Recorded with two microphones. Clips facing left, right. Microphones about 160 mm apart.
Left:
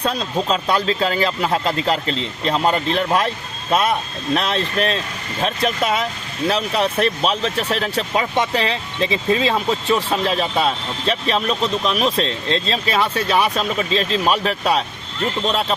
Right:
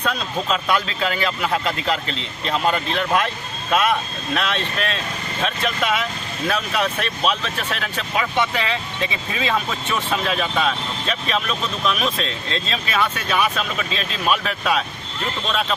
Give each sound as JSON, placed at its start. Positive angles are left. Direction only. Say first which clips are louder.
{"t": 0.0, "sound": "speech", "louder": "left 3 dB", "side_deg": 35}